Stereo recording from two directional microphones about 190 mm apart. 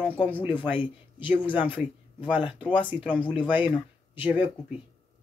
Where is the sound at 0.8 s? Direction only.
10° right (ahead or behind).